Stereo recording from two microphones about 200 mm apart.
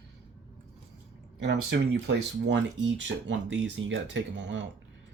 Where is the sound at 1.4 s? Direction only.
60° right (ahead or behind).